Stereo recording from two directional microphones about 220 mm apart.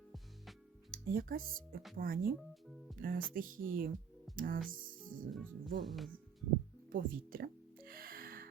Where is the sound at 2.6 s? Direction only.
Centre (ahead or behind).